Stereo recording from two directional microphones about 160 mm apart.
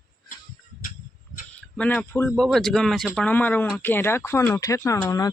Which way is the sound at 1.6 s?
5° left (ahead or behind).